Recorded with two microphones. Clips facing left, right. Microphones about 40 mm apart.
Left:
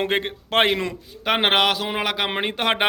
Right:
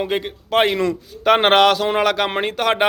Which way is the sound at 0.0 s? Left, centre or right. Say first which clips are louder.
Right 1 dB; left.